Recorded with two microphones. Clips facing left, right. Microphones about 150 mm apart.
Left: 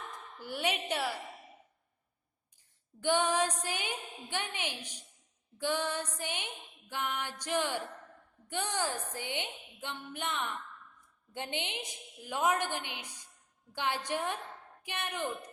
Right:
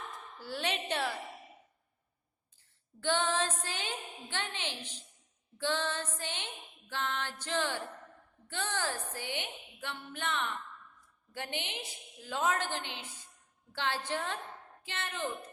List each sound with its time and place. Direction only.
0.3 s a woman's voice: 15° left (ahead or behind)
3.0 s a woman's voice: 15° left (ahead or behind)
5.5 s music: 15° left (ahead or behind)